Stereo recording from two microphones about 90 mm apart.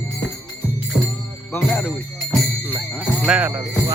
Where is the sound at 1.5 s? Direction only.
20° left (ahead or behind).